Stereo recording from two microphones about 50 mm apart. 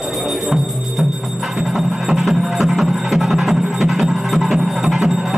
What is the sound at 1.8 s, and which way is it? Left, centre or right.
Music, centre.